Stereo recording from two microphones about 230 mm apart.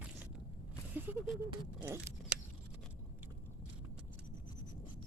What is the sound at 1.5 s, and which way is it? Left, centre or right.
Speech, centre.